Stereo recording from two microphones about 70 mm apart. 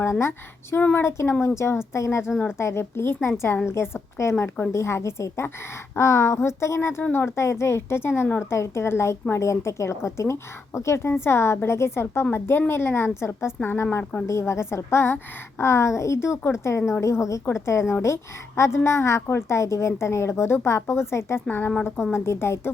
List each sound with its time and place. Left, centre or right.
0.0 s a woman's voice: left
13.9 s speech: left
14.3 s a woman's voice: left